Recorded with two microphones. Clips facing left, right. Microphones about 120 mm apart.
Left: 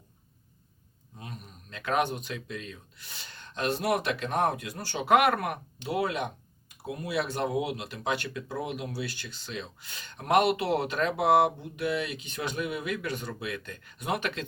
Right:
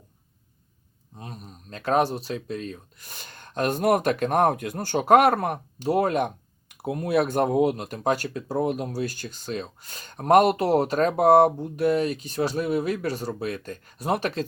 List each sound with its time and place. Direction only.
1.1 s speech: 35° right (ahead or behind)